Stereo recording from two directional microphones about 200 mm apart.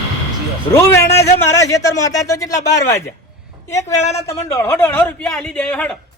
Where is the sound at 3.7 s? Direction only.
15° left (ahead or behind).